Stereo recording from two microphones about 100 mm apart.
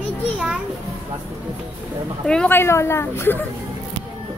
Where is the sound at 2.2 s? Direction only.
10° left (ahead or behind).